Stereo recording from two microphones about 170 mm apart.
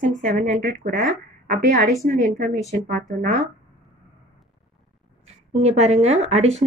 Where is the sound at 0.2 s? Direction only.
50° right (ahead or behind).